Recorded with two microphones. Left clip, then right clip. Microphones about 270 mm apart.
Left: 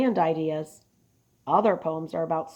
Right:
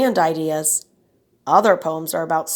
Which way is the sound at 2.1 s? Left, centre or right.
Right.